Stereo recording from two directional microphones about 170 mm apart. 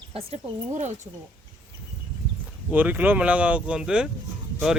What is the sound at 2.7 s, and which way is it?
Speech, 10° right (ahead or behind).